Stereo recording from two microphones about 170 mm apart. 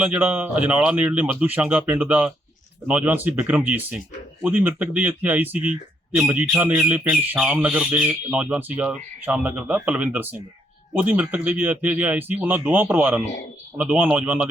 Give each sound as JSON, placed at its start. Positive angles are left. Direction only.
{"t": 0.0, "sound": "speech", "side_deg": -10}